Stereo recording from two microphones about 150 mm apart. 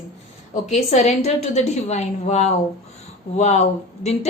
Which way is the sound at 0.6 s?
50° left (ahead or behind).